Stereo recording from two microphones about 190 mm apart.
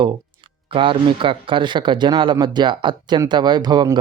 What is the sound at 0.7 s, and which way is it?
Speech, 25° right (ahead or behind).